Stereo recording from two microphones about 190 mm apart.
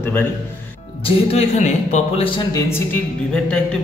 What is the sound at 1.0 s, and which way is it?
A man's voice, 30° left (ahead or behind).